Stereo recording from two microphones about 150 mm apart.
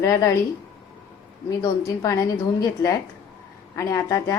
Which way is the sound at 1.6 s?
20° left (ahead or behind).